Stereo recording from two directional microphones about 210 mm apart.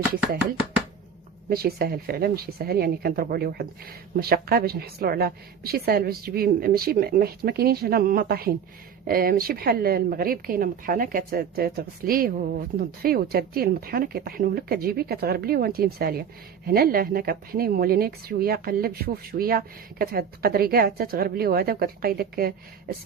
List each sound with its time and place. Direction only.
1.5 s a woman's voice: 45° right (ahead or behind)